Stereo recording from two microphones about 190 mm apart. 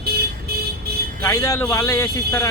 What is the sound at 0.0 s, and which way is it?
Vehicle, 55° right (ahead or behind).